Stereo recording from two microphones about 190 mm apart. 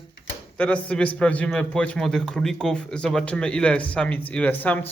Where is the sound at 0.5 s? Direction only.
5° left (ahead or behind).